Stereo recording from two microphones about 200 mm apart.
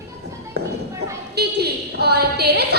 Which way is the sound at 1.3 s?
55° right (ahead or behind).